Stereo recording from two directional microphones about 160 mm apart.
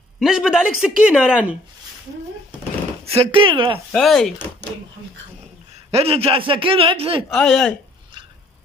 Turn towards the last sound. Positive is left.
turn(degrees=0)  # may be behind; listen again after turning